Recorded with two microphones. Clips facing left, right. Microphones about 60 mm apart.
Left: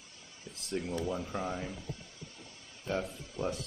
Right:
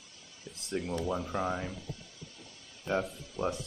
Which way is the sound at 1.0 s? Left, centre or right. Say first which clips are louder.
Right 2 dB; centre.